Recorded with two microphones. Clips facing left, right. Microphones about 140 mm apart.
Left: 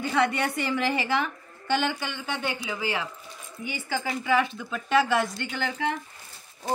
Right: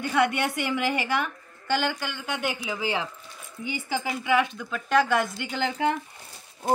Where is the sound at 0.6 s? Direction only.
10° right (ahead or behind).